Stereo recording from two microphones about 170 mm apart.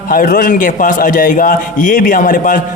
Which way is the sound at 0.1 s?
55° left (ahead or behind).